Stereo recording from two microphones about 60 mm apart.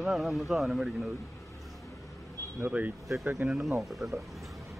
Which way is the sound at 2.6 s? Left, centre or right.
Right.